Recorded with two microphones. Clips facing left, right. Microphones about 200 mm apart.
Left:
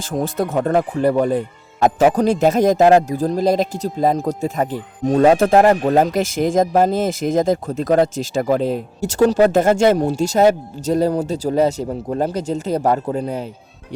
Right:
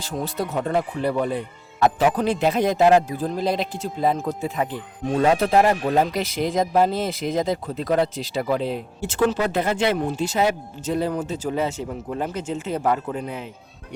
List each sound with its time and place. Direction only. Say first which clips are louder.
0.0 s speech: left 6 dB; 50° left (ahead or behind)